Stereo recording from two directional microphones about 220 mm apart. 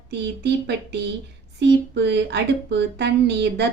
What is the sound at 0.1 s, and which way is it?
Speech, 50° right (ahead or behind).